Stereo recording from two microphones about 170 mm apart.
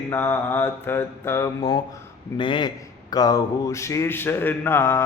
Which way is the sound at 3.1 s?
20° left (ahead or behind).